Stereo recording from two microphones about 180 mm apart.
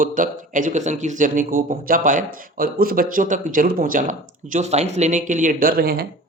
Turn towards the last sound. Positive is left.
turn(degrees=-60)  # may be behind; listen again after turning